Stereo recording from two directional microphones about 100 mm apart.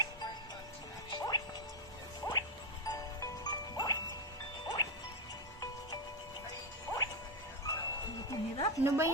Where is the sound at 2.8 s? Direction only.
35° left (ahead or behind).